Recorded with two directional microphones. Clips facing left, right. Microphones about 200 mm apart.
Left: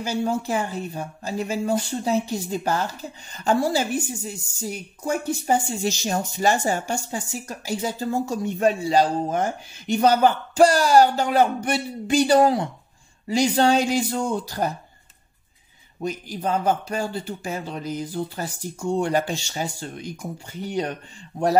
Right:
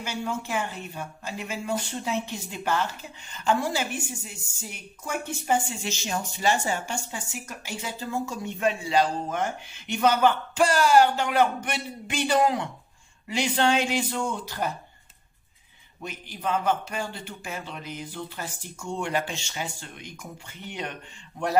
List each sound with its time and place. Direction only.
0.0 s speech: 40° left (ahead or behind)
16.0 s speech: 35° left (ahead or behind)